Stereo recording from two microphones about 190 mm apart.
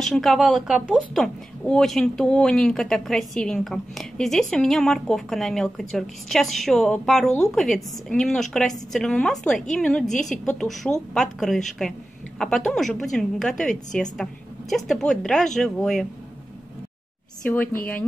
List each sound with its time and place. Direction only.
0.0 s speech: centre (ahead or behind)
17.5 s a woman's voice: 10° left (ahead or behind)